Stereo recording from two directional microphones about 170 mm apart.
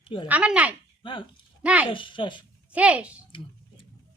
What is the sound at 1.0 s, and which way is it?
Speech, 30° left (ahead or behind).